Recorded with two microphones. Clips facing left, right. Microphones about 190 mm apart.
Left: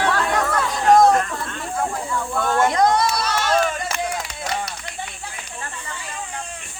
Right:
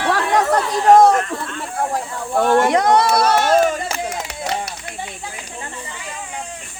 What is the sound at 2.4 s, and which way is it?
Speech, 70° right (ahead or behind).